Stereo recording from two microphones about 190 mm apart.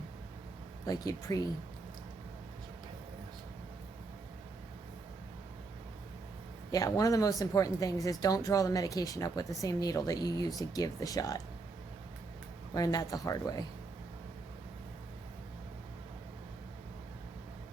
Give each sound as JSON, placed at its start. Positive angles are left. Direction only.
{"t": 0.9, "sound": "speech", "side_deg": 20}
{"t": 6.7, "sound": "speech", "side_deg": 20}
{"t": 12.7, "sound": "speech", "side_deg": 20}